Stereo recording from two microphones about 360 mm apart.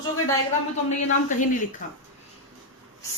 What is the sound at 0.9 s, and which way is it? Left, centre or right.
Speech, centre.